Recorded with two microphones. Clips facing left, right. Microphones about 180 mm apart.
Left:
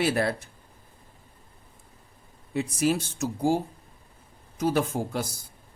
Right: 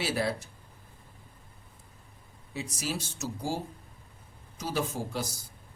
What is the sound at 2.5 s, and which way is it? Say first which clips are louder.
A man's voice: left 10 dB; 55° left (ahead or behind).